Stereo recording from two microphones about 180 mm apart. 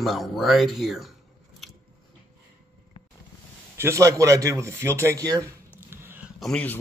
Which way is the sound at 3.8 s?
15° right (ahead or behind).